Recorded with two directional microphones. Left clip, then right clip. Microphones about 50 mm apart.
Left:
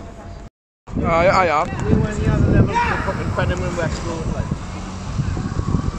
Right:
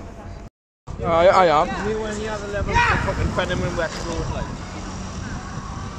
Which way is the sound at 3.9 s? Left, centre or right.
Left.